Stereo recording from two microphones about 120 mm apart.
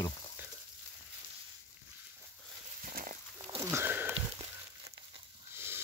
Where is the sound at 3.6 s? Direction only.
20° right (ahead or behind).